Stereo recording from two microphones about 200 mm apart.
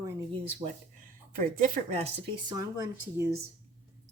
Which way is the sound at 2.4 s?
15° right (ahead or behind).